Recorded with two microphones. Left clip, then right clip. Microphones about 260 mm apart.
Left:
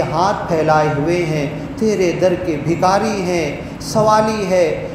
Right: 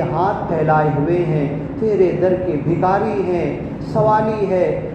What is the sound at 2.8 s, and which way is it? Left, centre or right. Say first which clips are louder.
A man's voice: left 2 dB; left.